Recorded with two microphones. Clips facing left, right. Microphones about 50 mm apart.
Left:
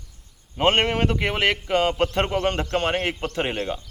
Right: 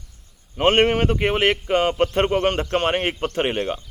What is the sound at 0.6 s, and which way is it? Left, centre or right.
Speech, right.